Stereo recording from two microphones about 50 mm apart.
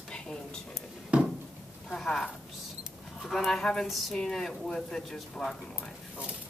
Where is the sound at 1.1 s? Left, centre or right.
Right.